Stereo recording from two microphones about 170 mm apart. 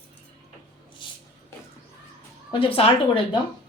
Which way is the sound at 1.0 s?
30° left (ahead or behind).